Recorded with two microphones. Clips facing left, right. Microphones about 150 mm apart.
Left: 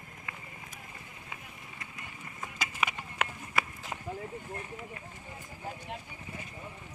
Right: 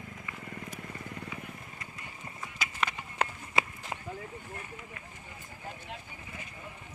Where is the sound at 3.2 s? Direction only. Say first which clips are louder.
Right 2 dB; 35° right (ahead or behind).